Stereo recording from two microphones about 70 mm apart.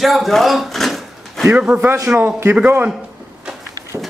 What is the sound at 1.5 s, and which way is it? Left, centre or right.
Speech, right.